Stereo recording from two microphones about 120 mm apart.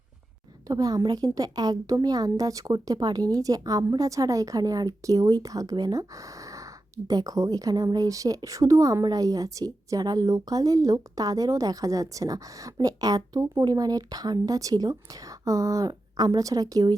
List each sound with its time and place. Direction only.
0.7 s a woman's voice: 30° right (ahead or behind)